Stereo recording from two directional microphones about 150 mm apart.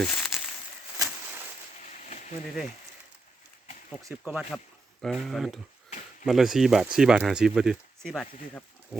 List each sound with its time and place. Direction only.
0.0 s speech: 5° left (ahead or behind)
1.9 s a sound: 55° left (ahead or behind)
4.3 s speech: 5° right (ahead or behind)
8.9 s pig: 5° right (ahead or behind)